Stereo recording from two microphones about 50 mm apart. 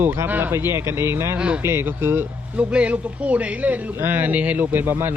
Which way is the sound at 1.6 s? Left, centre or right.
Right.